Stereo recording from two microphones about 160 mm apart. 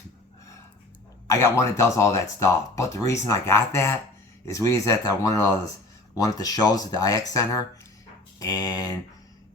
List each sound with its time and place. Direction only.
1.3 s speech: 20° left (ahead or behind)